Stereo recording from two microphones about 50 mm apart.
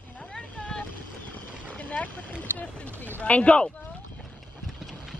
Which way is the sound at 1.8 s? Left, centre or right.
Left.